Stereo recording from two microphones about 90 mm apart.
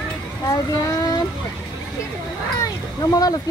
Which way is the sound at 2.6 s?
45° left (ahead or behind).